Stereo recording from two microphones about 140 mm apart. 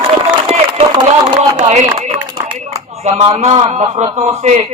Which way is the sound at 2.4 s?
30° right (ahead or behind).